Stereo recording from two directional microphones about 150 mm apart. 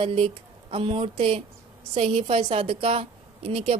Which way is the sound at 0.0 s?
40° right (ahead or behind).